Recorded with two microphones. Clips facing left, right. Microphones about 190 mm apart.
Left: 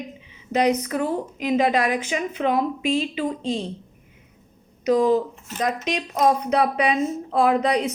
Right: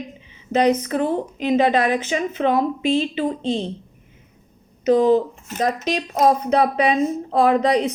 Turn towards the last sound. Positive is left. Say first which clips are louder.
# right 3 dB
turn(degrees=-30)  # may be behind; listen again after turning